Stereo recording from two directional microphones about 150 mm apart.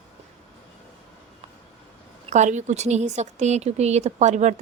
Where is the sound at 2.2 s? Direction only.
50° right (ahead or behind).